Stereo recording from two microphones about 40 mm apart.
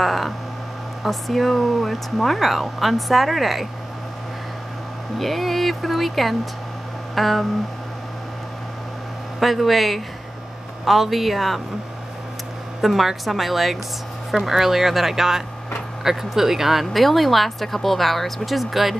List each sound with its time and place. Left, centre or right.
0.0 s speech: centre
5.2 s speech: centre
9.4 s speech: centre
12.8 s speech: centre